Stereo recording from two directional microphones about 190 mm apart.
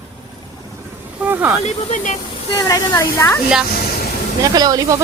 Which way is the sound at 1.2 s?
10° right (ahead or behind).